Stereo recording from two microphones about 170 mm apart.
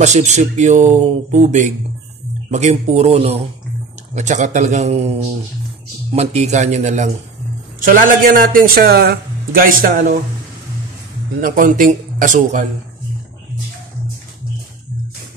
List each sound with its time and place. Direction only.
0.0 s speech: 45° right (ahead or behind)
6.1 s speech: 40° right (ahead or behind)
7.8 s speech: 55° right (ahead or behind)
11.4 s speech: 50° right (ahead or behind)